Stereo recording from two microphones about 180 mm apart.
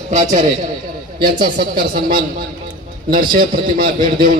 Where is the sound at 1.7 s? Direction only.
50° right (ahead or behind).